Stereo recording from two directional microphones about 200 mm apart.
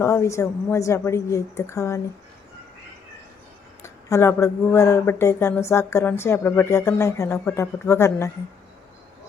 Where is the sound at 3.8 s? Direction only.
15° left (ahead or behind).